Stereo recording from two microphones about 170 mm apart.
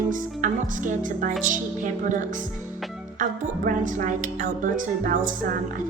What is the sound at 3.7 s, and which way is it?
A woman's voice, 50° right (ahead or behind).